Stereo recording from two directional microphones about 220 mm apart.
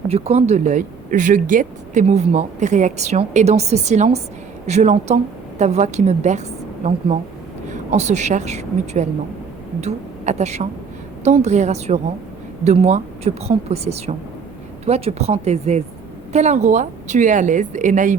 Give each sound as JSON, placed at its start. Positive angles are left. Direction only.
{"t": 0.1, "sound": "speech", "side_deg": -30}
{"t": 7.9, "sound": "a woman's voice", "side_deg": -30}